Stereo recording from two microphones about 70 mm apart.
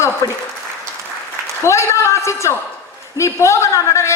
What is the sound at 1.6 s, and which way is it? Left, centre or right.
A woman's voice, left.